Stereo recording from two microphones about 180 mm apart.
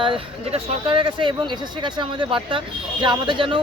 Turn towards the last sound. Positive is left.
turn(degrees=-30)  # may be behind; listen again after turning